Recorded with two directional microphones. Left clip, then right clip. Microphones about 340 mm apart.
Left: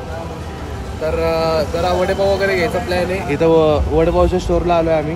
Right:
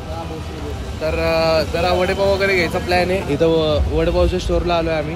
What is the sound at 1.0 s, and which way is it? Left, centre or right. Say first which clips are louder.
Speech: left 1 dB; centre.